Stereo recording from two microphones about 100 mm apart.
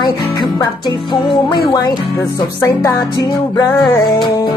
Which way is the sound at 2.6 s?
30° left (ahead or behind).